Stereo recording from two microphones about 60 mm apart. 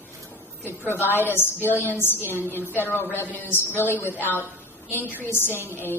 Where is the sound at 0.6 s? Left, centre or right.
Left.